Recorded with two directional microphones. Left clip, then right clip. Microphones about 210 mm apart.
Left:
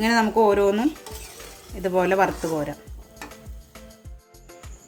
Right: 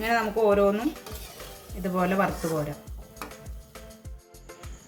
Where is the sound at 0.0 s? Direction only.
60° left (ahead or behind).